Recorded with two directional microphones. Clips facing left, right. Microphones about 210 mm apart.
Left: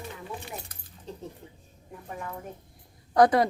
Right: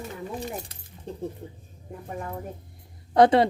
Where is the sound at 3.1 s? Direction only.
25° right (ahead or behind).